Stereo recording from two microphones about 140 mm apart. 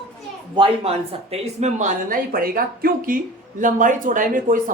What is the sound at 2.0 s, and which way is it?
Speech, 90° right.